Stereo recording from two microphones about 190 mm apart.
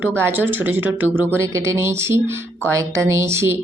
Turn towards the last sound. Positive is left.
turn(degrees=-15)  # may be behind; listen again after turning